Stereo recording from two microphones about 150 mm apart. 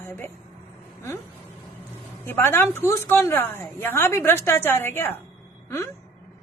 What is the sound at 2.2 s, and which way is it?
A woman's voice, 15° left (ahead or behind).